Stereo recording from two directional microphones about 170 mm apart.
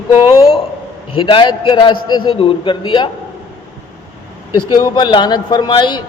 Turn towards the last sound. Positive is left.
turn(degrees=25)  # may be behind; listen again after turning